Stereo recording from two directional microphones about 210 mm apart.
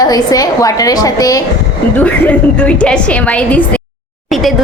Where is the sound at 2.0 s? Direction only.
5° left (ahead or behind).